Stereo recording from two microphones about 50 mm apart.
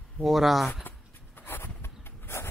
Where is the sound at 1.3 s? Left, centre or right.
Left.